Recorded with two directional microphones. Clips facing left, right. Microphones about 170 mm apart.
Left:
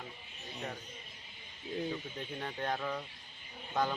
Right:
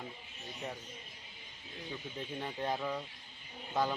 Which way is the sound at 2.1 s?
5° right (ahead or behind).